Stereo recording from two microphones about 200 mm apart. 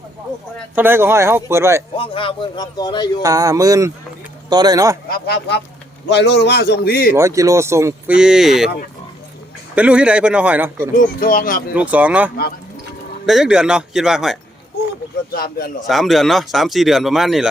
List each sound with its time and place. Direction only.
0.8 s speech: 10° right (ahead or behind)
2.0 s a man's voice: 25° left (ahead or behind)
3.2 s speech: 15° right (ahead or behind)
5.0 s a man's voice: 50° left (ahead or behind)
7.1 s speech: 15° right (ahead or behind)
9.7 s speech: 5° right (ahead or behind)
10.9 s speech: 45° left (ahead or behind)
11.7 s speech: 5° right (ahead or behind)
15.9 s speech: centre (ahead or behind)